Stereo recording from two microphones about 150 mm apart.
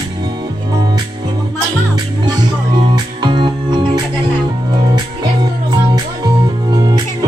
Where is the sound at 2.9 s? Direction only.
30° right (ahead or behind).